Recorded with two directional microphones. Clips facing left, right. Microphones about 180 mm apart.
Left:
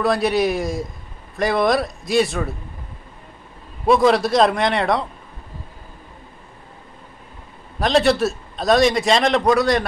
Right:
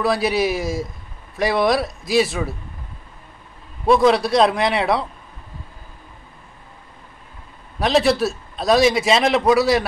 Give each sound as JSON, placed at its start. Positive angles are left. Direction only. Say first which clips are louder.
{"t": 0.0, "sound": "a man's voice", "louder": "left 1 dB", "side_deg": 0}
{"t": 3.8, "sound": "a man's voice", "louder": "even", "side_deg": 0}
{"t": 7.8, "sound": "a man's voice", "louder": "even", "side_deg": 0}